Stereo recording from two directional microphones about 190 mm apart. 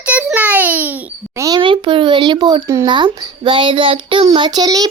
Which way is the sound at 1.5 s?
25° right (ahead or behind).